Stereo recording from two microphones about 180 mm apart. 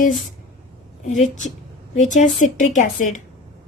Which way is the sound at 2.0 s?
40° left (ahead or behind).